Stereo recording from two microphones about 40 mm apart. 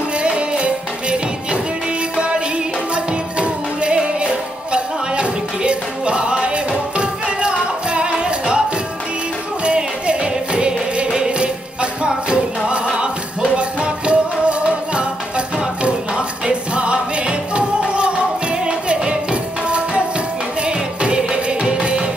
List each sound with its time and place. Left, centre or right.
0.2 s music: right
9.7 s music: right